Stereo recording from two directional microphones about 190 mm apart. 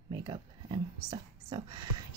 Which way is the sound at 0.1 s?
20° right (ahead or behind).